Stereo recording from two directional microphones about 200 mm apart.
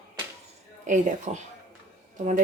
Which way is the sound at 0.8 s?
40° right (ahead or behind).